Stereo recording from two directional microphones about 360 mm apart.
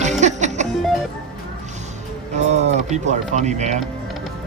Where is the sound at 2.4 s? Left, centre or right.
Centre.